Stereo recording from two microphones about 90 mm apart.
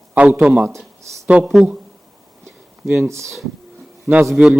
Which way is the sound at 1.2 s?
15° right (ahead or behind).